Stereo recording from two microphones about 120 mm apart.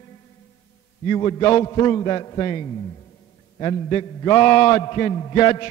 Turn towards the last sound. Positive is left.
turn(degrees=35)  # may be behind; listen again after turning